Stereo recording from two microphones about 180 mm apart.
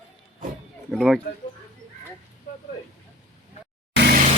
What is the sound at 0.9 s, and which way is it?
Speech, centre (ahead or behind).